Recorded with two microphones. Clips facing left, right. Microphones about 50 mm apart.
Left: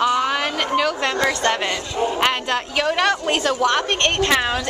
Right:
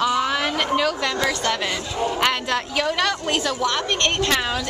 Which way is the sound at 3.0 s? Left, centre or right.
Left.